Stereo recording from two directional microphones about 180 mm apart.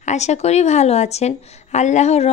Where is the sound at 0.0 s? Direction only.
40° left (ahead or behind).